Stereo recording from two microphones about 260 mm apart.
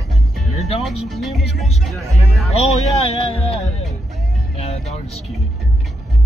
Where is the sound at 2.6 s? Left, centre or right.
Left.